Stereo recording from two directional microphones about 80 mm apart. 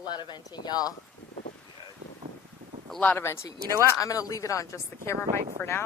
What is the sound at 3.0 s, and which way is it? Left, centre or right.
Speech, left.